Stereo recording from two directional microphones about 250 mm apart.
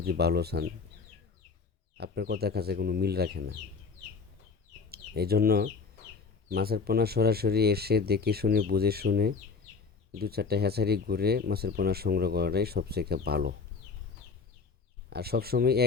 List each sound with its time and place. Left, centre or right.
0.0 s speech: right
2.0 s speech: right
4.9 s speech: right
15.1 s speech: right